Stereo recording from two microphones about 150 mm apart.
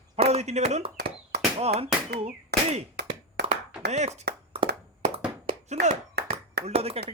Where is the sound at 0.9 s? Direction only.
90° right.